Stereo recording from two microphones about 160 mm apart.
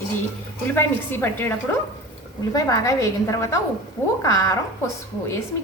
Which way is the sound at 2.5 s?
20° left (ahead or behind).